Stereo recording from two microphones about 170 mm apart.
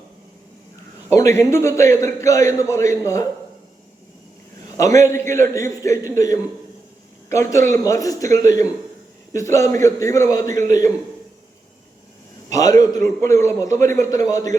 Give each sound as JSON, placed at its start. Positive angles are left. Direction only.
{"t": 1.1, "sound": "a man's voice", "side_deg": 20}
{"t": 4.8, "sound": "a man's voice", "side_deg": 20}
{"t": 12.5, "sound": "a man's voice", "side_deg": 20}